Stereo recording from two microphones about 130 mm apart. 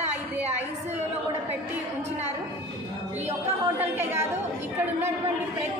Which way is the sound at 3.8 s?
15° right (ahead or behind).